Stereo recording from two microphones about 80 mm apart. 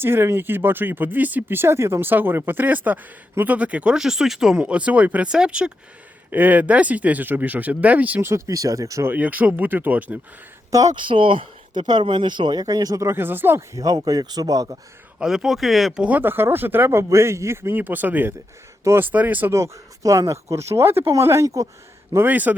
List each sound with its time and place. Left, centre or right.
0.0 s speech: right
8.3 s speech: right
9.0 s speech: right
10.7 s speech: right
10.9 s speech: right
13.1 s speech: right
13.7 s speech: right
15.2 s speech: centre
16.1 s speech: right
19.5 s speech: right
22.1 s speech: right